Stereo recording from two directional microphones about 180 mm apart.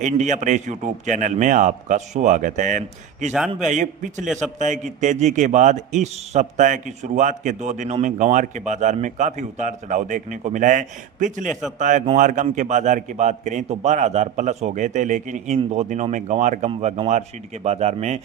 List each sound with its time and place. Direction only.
0.0 s a man's voice: 40° right (ahead or behind)
4.3 s a man's voice: centre (ahead or behind)
4.6 s a man's voice: 45° right (ahead or behind)